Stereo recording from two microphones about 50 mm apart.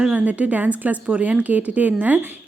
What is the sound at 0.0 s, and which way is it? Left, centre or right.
Speech, right.